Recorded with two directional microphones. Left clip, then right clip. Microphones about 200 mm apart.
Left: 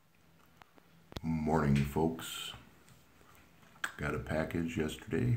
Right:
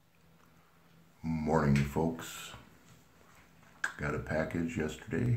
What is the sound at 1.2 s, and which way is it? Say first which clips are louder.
Speech: right 2 dB; 5° left (ahead or behind).